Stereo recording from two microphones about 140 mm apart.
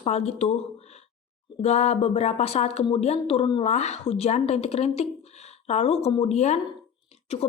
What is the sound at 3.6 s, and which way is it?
Speech, 55° left (ahead or behind).